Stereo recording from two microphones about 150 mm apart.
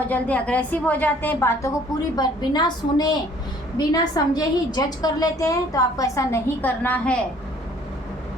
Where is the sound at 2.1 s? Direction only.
30° left (ahead or behind); by 7.2 s 10° left (ahead or behind).